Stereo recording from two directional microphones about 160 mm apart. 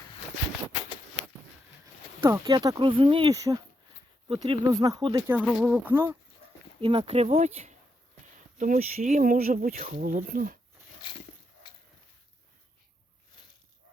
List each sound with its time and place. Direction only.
2.4 s speech: 25° right (ahead or behind)
3.3 s speech: 20° right (ahead or behind)
4.4 s speech: 30° right (ahead or behind)
5.4 s speech: 5° left (ahead or behind)
5.6 s speech: 10° right (ahead or behind)
6.8 s speech: 40° right (ahead or behind)
8.5 s speech: 55° right (ahead or behind)